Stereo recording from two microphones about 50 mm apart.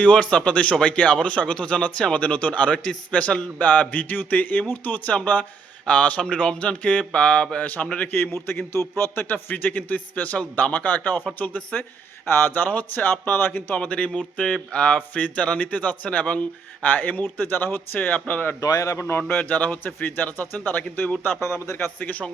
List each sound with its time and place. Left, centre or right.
0.0 s a man's voice: left
8.1 s speech: left
9.3 s a man's voice: left
12.2 s speech: left
13.7 s speech: left
14.9 s a man's voice: left
18.8 s speech: left
19.1 s speech: left
19.5 s a man's voice: left
22.0 s speech: left